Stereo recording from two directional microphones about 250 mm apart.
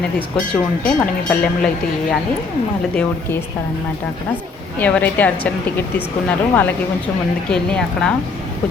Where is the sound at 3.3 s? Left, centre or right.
Centre.